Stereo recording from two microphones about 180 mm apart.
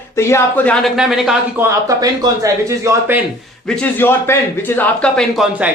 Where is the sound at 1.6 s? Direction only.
20° right (ahead or behind).